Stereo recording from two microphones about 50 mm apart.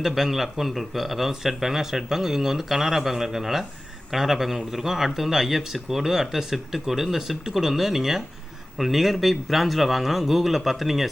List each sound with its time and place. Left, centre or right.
0.0 s speech: centre